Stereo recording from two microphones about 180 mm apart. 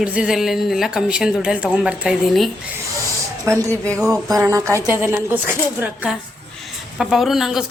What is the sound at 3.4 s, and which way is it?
A woman's voice, 15° right (ahead or behind).